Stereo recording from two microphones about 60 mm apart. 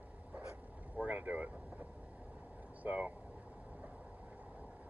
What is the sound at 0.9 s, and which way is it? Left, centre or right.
Speech, right.